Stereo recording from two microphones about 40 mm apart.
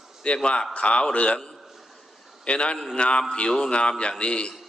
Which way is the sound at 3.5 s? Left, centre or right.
Centre.